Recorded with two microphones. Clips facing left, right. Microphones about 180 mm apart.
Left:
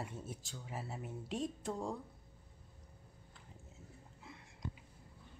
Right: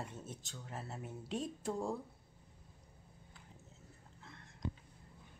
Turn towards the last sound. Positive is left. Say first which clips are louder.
# left 2 dB
turn(degrees=10)  # may be behind; listen again after turning